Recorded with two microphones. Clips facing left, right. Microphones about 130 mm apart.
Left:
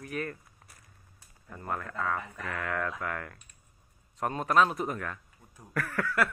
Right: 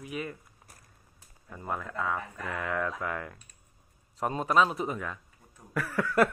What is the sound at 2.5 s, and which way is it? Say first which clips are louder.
Speech: right 2 dB; 25° right (ahead or behind).